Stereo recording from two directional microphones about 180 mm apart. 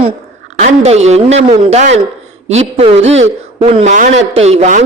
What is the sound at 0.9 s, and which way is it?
A man's voice, 35° right (ahead or behind).